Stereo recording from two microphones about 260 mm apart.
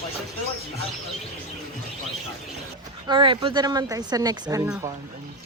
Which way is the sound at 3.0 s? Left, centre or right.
Centre.